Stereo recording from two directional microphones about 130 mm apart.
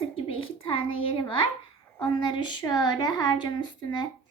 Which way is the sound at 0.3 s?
45° left (ahead or behind).